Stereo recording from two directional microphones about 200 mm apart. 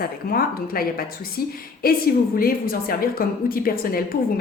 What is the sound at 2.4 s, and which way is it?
Speech, 45° left (ahead or behind).